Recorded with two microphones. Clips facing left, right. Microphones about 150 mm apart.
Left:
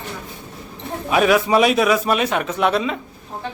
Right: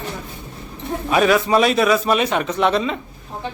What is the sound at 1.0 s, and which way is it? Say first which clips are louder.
A man's voice: even; 5° left (ahead or behind).